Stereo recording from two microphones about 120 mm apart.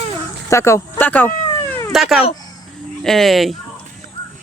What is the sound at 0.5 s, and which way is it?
Cat, 25° left (ahead or behind).